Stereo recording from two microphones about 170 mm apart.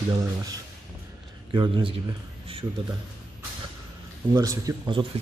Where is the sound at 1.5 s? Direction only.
30° right (ahead or behind).